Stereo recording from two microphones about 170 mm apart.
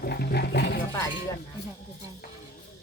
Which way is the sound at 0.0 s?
65° left (ahead or behind).